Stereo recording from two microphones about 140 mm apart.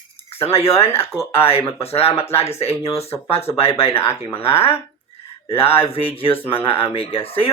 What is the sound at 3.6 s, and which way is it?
Speech, 45° left (ahead or behind).